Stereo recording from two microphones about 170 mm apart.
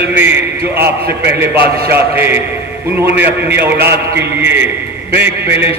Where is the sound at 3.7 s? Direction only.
70° right (ahead or behind).